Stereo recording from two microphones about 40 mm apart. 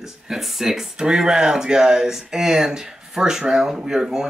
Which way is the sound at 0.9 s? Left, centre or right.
Centre.